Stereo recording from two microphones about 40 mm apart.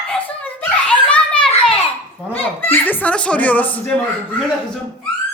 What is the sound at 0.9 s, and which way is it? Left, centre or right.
Children playing, left.